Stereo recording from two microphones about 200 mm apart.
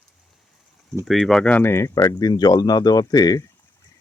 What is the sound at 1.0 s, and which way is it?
Speech, centre (ahead or behind).